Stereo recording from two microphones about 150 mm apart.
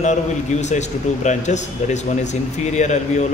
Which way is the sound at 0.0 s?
50° left (ahead or behind).